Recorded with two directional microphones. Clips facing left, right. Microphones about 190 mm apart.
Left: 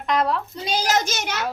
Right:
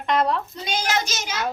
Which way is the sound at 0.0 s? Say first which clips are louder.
Even; centre (ahead or behind).